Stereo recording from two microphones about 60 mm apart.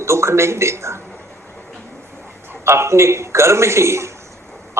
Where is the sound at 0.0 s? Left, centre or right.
Right.